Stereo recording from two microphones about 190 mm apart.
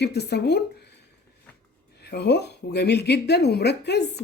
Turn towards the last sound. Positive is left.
turn(degrees=60)  # may be behind; listen again after turning